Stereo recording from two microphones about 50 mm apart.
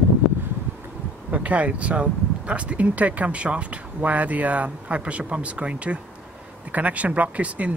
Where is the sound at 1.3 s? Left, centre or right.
Right.